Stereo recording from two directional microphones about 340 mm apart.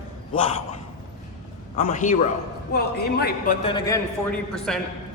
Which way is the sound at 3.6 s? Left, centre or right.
Centre.